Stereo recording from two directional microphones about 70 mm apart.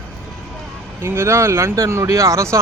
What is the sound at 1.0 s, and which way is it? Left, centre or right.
Speech, right.